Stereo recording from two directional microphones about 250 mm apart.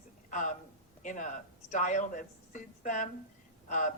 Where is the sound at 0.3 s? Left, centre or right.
Left.